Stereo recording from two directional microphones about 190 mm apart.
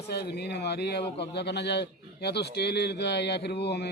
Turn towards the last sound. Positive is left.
turn(degrees=60)  # may be behind; listen again after turning